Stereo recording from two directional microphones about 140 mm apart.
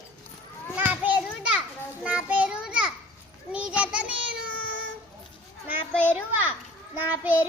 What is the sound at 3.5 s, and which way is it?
Child singing, 10° right (ahead or behind).